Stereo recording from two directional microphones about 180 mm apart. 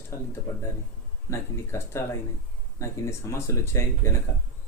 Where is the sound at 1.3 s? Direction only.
15° left (ahead or behind).